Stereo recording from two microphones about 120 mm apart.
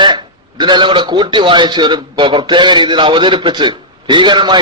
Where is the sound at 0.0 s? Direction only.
40° right (ahead or behind).